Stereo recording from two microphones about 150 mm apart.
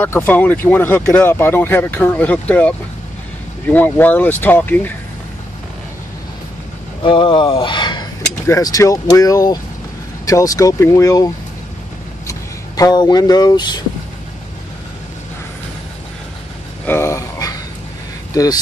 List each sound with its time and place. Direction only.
0.0 s speech: 10° left (ahead or behind)
7.0 s speech: 35° left (ahead or behind)
16.8 s a sound: 15° left (ahead or behind)
18.3 s speech: 25° left (ahead or behind)